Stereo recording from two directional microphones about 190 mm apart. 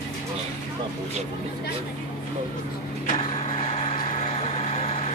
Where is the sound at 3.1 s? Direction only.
30° left (ahead or behind).